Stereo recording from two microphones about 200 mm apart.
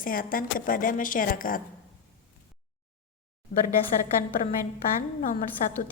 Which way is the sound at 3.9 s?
40° left (ahead or behind).